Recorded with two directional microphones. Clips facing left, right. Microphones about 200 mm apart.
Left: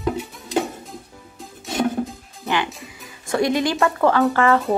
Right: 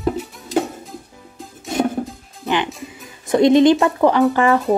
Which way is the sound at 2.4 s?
20° right (ahead or behind).